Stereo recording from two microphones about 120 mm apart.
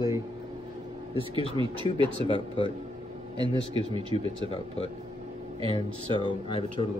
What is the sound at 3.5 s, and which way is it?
Speech, 45° right (ahead or behind).